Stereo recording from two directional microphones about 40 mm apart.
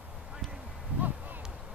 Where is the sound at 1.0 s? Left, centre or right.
Right.